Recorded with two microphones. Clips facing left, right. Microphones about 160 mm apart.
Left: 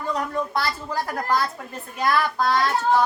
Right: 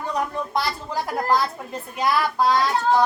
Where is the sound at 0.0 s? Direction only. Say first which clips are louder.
Even; 15° right (ahead or behind).